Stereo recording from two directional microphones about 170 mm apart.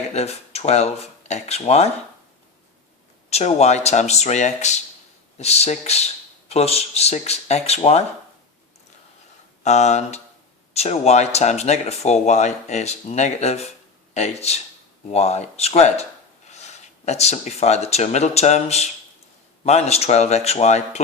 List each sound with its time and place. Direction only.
0.1 s speech: 40° left (ahead or behind)
3.2 s speech: 40° left (ahead or behind)
9.6 s speech: 40° left (ahead or behind)